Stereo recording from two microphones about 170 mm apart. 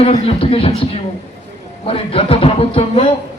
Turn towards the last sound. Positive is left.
turn(degrees=35)  # may be behind; listen again after turning